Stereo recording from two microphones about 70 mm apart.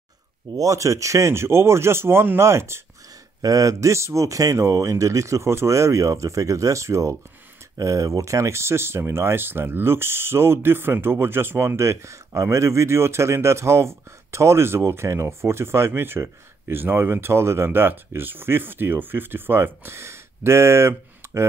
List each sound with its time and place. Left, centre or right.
0.6 s speech: right
3.4 s speech: right